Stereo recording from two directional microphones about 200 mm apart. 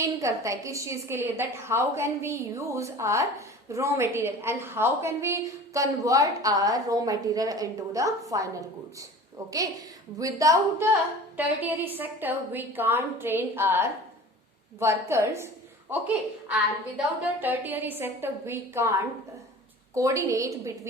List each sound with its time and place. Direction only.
0.0 s a woman's voice: 15° right (ahead or behind)
17.2 s a woman's voice: 10° right (ahead or behind)